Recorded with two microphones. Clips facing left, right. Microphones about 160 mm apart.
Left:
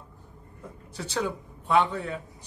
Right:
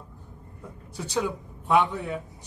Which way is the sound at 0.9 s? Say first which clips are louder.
Right 2 dB; 10° right (ahead or behind).